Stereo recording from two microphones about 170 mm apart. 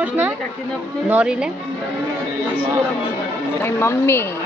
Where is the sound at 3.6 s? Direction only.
15° left (ahead or behind).